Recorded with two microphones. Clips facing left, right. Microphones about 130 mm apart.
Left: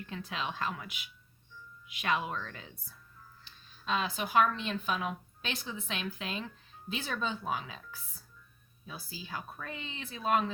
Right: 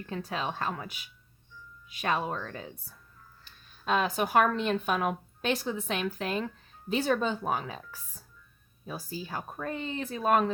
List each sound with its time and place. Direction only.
0.0 s speech: 40° right (ahead or behind)
3.4 s speech: 50° right (ahead or behind)